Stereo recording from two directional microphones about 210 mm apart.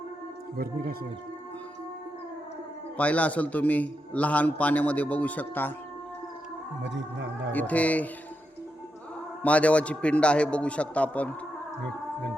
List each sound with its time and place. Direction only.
0.5 s speech: 45° right (ahead or behind)
3.0 s a man's voice: 5° left (ahead or behind)
6.8 s music: 55° right (ahead or behind)
7.5 s a man's voice: 5° left (ahead or behind)
9.4 s a man's voice: 5° left (ahead or behind)